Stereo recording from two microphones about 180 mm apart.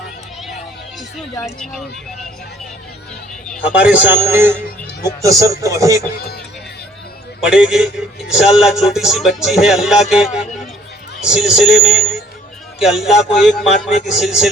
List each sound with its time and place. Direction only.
1.5 s music: centre (ahead or behind)
3.7 s a man's voice: 5° right (ahead or behind)
7.4 s music: 5° right (ahead or behind)